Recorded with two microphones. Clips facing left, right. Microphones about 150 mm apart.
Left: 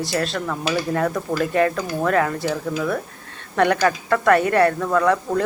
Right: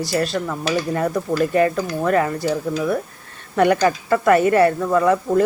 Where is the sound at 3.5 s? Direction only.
5° right (ahead or behind).